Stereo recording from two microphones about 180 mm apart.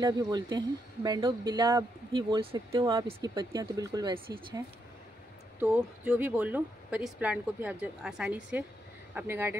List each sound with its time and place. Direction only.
0.0 s speech: 20° right (ahead or behind)
5.6 s speech: 5° right (ahead or behind)